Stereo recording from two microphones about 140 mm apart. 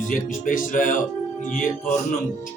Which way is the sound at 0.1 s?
70° left (ahead or behind).